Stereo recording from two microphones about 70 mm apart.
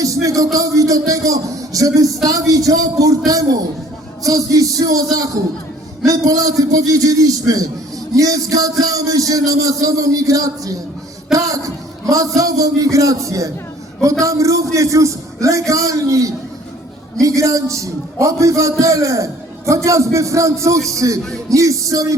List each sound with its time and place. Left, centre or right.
0.0 s a man's voice: right